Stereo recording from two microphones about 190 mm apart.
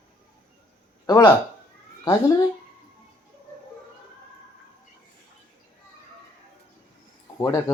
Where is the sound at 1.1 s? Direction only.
20° left (ahead or behind).